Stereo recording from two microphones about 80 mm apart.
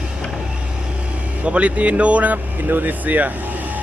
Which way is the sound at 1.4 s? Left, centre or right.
Centre.